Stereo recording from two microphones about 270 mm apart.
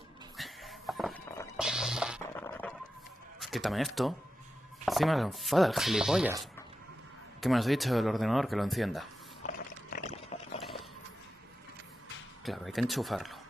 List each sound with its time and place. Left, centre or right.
0.4 s music: centre
2.3 s a sound: centre
3.3 s speech: centre
7.3 s speech: centre
9.5 s water: left
12.4 s speech: centre